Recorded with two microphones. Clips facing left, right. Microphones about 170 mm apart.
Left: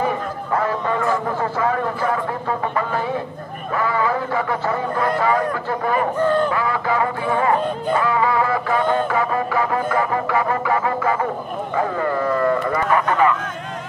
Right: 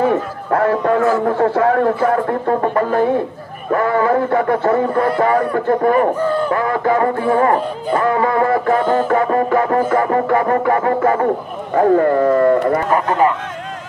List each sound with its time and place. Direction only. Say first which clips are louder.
0.1 s a sound: right 5 dB; 60° right (ahead or behind)
1.2 s speech: right 7 dB; 60° right (ahead or behind)
6.1 s speech: even; 10° right (ahead or behind)
6.5 s speech: right 5 dB; 50° right (ahead or behind)